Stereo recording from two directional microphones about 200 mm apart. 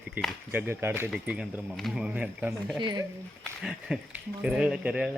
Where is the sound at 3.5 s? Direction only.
5° right (ahead or behind).